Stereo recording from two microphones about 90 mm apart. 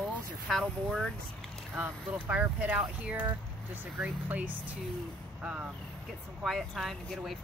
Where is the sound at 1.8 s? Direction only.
20° right (ahead or behind).